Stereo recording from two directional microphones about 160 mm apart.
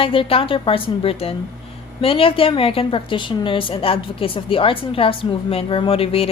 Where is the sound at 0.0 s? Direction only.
35° left (ahead or behind).